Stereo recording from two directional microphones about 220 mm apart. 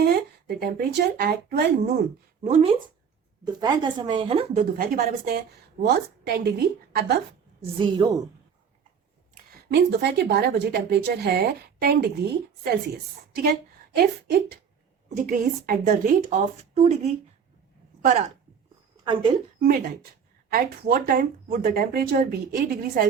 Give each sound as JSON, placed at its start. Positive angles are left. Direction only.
{"t": 0.0, "sound": "speech", "side_deg": -45}
{"t": 2.4, "sound": "speech", "side_deg": -30}
{"t": 3.4, "sound": "a woman's voice", "side_deg": -20}
{"t": 4.8, "sound": "speech", "side_deg": -40}
{"t": 7.8, "sound": "a woman's voice", "side_deg": -20}
{"t": 9.6, "sound": "a woman's voice", "side_deg": -50}
{"t": 19.0, "sound": "a woman's voice", "side_deg": -20}
{"t": 19.5, "sound": "speech", "side_deg": -40}